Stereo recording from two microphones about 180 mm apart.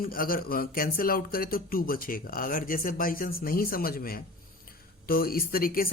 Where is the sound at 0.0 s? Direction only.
55° left (ahead or behind).